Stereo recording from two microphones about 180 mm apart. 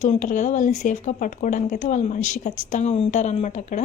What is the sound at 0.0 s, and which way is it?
A woman's voice, 40° left (ahead or behind).